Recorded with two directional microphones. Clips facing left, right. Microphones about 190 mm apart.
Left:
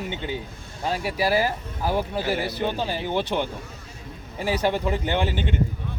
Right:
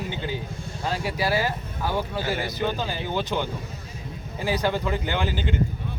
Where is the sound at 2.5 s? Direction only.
30° left (ahead or behind).